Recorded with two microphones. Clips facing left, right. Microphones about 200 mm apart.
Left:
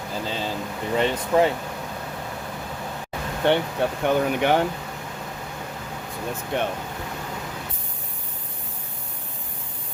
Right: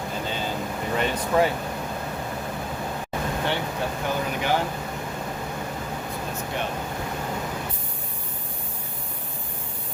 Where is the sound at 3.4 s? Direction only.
60° left (ahead or behind).